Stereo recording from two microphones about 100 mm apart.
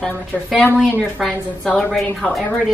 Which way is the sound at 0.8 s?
Centre (ahead or behind).